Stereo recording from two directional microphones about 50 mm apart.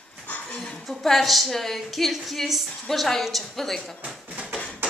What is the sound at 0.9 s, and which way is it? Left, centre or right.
A woman's voice, centre.